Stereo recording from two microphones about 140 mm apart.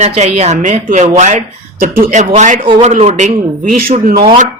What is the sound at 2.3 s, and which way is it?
Speech, 60° right (ahead or behind).